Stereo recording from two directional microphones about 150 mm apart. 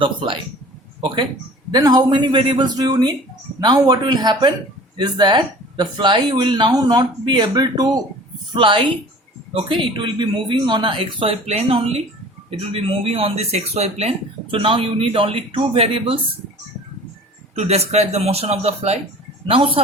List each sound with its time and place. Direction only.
0.0 s speech: 35° right (ahead or behind)
17.5 s speech: 45° right (ahead or behind)